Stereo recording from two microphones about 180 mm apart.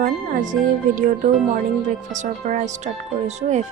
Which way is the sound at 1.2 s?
45° right (ahead or behind).